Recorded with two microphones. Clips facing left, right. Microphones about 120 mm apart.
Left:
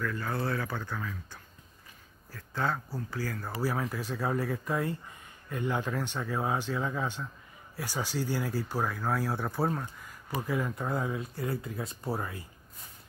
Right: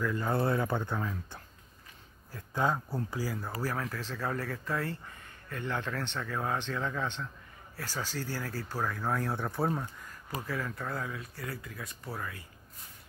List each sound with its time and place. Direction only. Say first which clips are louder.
0.0 s speech: right 3 dB; 20° right (ahead or behind)
2.3 s speech: right 2 dB; 15° right (ahead or behind)
3.6 s speech: left 5 dB; 10° left (ahead or behind)
10.3 s speech: left 4 dB; 15° left (ahead or behind)